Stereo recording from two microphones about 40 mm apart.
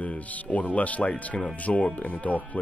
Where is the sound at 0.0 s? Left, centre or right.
Left.